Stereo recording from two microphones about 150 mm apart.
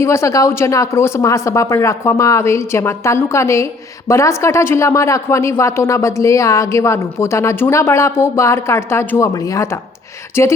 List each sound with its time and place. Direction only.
0.0 s speech: 20° left (ahead or behind)